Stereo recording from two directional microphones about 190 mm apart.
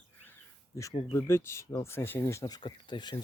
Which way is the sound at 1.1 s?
15° left (ahead or behind).